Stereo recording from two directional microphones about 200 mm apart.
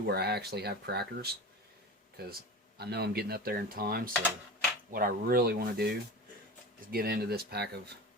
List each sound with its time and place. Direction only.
0.0 s speech: 55° right (ahead or behind)